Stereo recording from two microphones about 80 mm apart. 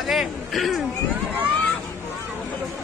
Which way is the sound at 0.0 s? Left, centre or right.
Centre.